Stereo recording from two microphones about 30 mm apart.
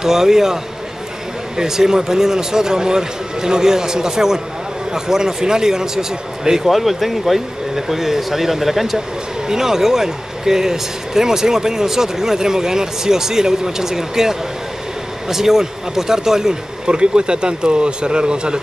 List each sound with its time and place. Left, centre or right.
0.0 s speech: centre
1.6 s speech: centre
6.6 s speech: centre
16.8 s a man's voice: right